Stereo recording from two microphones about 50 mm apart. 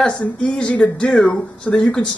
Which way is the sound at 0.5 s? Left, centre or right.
Left.